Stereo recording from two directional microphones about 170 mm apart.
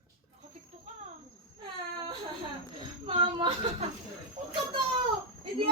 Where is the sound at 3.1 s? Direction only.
30° right (ahead or behind).